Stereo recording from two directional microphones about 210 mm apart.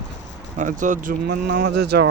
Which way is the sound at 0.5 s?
35° right (ahead or behind).